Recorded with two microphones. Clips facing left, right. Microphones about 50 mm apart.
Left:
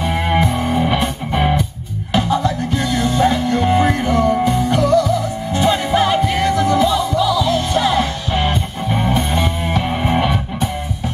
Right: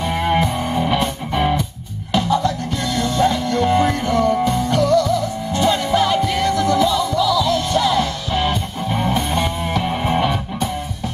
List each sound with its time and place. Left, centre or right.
0.0 s music: centre